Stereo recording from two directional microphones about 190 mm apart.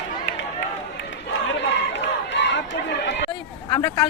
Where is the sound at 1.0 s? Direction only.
75° left (ahead or behind).